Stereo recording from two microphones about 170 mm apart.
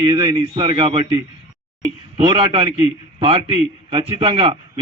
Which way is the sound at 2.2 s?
30° right (ahead or behind).